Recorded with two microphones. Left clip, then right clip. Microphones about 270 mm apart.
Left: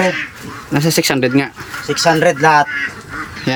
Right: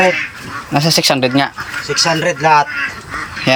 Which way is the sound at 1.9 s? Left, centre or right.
Left.